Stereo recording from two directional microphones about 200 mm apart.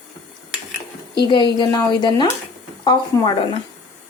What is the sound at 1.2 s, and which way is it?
A woman's voice, 20° left (ahead or behind).